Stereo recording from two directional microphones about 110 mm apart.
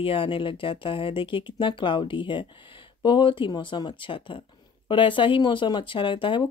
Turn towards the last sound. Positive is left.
turn(degrees=50)  # may be behind; listen again after turning